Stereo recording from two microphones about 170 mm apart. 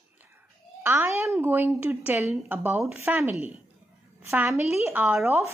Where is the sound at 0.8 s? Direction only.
15° right (ahead or behind).